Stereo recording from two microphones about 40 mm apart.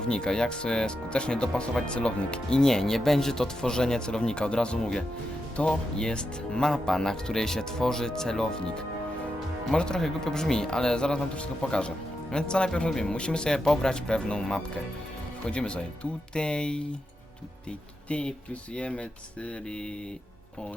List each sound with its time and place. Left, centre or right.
0.0 s speech: left